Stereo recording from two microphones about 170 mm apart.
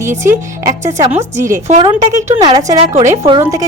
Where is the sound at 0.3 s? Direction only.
15° right (ahead or behind).